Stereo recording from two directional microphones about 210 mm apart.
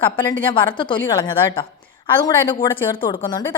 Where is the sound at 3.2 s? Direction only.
10° left (ahead or behind).